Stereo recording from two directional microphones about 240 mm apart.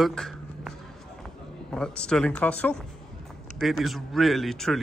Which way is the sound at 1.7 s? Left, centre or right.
Centre.